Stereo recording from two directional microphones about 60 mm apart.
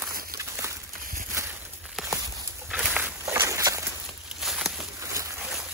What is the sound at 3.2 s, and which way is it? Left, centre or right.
Walk, right.